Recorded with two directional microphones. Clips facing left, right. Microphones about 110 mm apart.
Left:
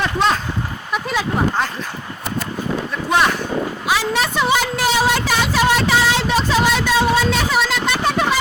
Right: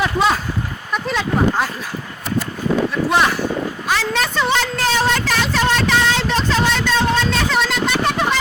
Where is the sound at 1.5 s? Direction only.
5° right (ahead or behind).